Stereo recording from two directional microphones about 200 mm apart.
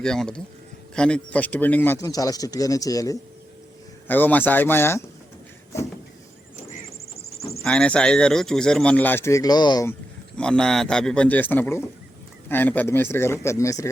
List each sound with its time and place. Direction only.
0.0 s speech: 5° left (ahead or behind)
7.6 s speech: 5° left (ahead or behind); by 9.9 s 20° left (ahead or behind)
10.3 s speech: 5° left (ahead or behind)